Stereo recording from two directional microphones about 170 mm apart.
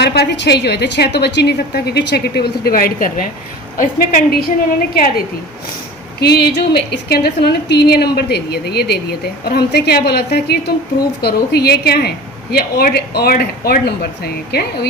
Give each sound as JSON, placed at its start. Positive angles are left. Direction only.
{"t": 0.0, "sound": "a woman's voice", "side_deg": 80}
{"t": 6.1, "sound": "a woman's voice", "side_deg": 70}